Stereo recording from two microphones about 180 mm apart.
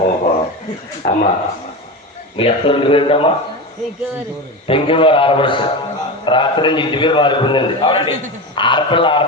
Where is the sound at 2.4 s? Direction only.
30° left (ahead or behind).